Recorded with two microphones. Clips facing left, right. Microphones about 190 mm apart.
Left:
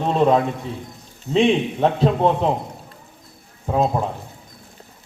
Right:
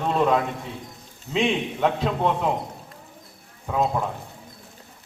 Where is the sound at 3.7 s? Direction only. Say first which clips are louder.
Left 4 dB; 30° left (ahead or behind).